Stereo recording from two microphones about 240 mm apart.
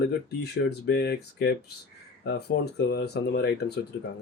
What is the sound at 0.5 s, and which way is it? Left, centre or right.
Speech, left.